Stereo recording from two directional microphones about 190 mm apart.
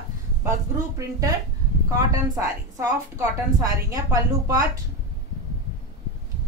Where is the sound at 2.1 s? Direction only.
15° right (ahead or behind).